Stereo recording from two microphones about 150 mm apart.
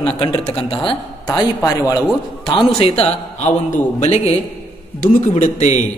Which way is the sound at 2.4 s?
40° left (ahead or behind).